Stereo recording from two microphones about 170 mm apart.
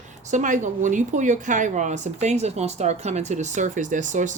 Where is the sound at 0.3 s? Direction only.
45° right (ahead or behind).